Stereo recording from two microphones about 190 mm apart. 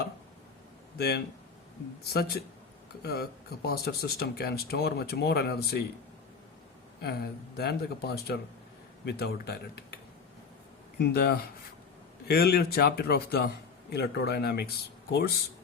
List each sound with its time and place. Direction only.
0.9 s speech: 60° left (ahead or behind)
7.0 s speech: 55° left (ahead or behind)